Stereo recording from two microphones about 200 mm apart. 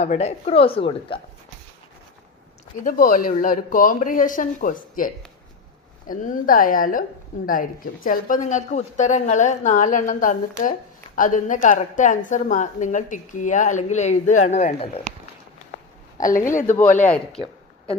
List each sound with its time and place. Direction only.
0.0 s a woman's voice: 35° left (ahead or behind)
2.8 s a woman's voice: 40° left (ahead or behind)
16.2 s a woman's voice: 40° left (ahead or behind)